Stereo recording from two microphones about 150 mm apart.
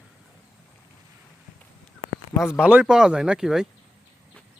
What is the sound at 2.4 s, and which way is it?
Speech, 5° right (ahead or behind).